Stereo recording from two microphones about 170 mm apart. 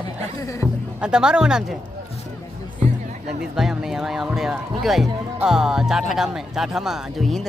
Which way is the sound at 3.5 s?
5° right (ahead or behind).